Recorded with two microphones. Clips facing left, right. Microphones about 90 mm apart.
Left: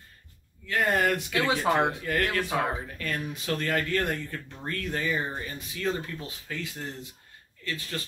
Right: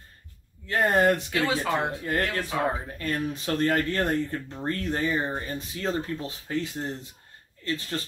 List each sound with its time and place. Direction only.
0.7 s speech: 30° right (ahead or behind)
1.5 s speech: 20° left (ahead or behind)
2.0 s speech: 30° right (ahead or behind)